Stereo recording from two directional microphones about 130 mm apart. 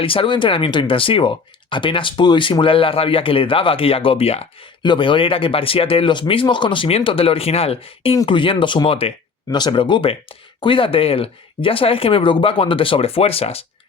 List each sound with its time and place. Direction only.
0.0 s speech: 45° left (ahead or behind)
9.5 s speech: 35° left (ahead or behind)